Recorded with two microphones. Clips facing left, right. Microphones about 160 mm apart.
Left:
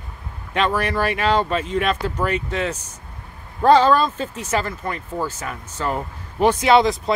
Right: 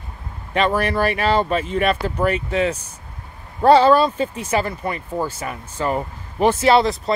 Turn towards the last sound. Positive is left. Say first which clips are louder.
# even
turn(degrees=0)  # may be behind; listen again after turning